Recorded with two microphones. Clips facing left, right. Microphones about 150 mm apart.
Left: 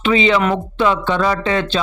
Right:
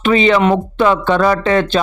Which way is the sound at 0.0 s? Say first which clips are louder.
Right 3 dB; 50° right (ahead or behind).